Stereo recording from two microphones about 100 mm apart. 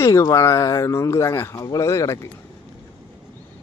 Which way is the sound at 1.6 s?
35° left (ahead or behind).